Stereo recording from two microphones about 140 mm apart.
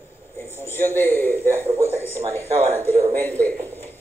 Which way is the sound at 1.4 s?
15° right (ahead or behind).